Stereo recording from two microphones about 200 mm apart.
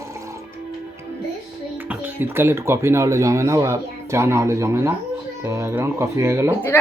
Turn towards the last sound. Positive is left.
turn(degrees=-15)  # may be behind; listen again after turning